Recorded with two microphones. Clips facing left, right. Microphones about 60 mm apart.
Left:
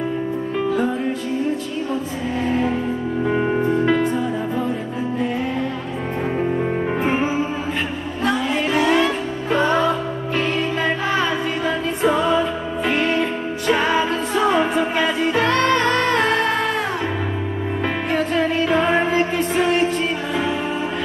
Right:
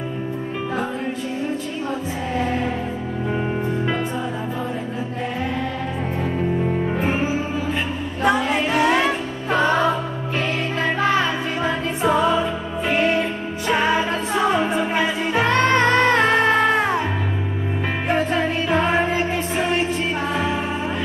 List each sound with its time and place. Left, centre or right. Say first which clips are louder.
3.3 s music: left 5 dB; centre
3.7 s music: left 5 dB; centre
6.6 s music: left 1 dB; left
8.2 s music: right 2 dB; right
12.0 s music: even; centre
15.4 s music: right 2 dB; right
18.7 s music: right 1 dB; centre